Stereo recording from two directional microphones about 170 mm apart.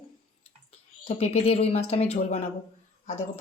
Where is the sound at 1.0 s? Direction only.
35° left (ahead or behind).